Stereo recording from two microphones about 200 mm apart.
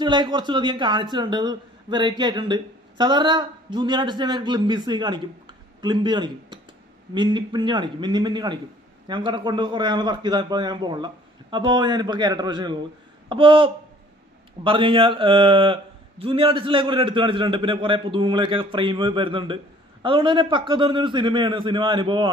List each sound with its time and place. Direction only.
0.0 s a man's voice: 20° right (ahead or behind)